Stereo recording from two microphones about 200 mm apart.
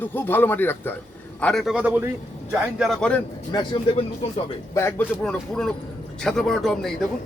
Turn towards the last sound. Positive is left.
turn(degrees=0)  # may be behind; listen again after turning